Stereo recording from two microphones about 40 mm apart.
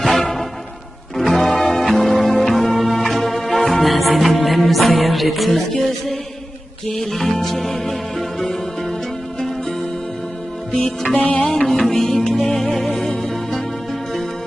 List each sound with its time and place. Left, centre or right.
0.0 s music: centre
11.2 s music: left
11.4 s music: centre